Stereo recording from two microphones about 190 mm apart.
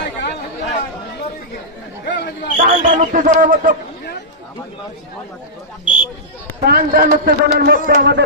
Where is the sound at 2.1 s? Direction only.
55° left (ahead or behind).